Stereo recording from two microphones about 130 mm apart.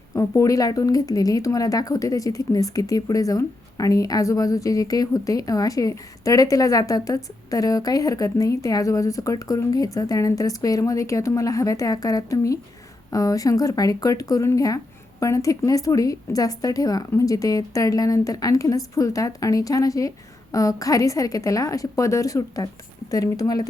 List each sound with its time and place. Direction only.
0.1 s speech: 25° left (ahead or behind)